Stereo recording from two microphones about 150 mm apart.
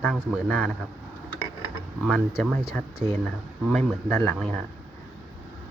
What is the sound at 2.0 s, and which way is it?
A man's voice, centre (ahead or behind).